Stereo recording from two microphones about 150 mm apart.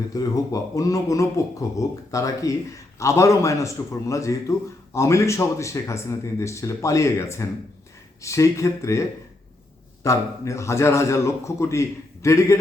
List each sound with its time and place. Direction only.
0.1 s a man's voice: 25° left (ahead or behind)